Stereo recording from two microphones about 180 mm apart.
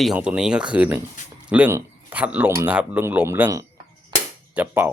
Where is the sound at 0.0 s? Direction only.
5° right (ahead or behind).